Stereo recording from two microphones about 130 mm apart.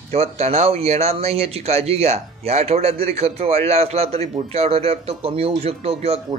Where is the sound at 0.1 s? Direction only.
50° right (ahead or behind).